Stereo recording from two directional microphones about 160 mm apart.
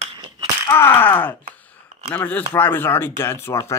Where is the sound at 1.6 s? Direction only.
10° left (ahead or behind).